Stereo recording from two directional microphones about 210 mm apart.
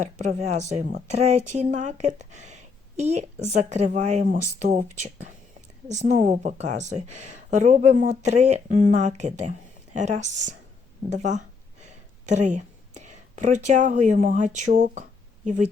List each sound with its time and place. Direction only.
0.0 s a woman's voice: 35° right (ahead or behind)